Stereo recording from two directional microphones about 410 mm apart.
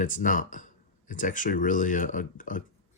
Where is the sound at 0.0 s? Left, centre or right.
Centre.